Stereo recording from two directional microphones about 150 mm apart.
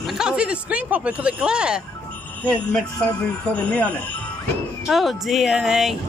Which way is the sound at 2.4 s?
5° left (ahead or behind).